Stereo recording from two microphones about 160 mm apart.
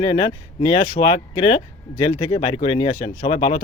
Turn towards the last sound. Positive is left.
turn(degrees=30)  # may be behind; listen again after turning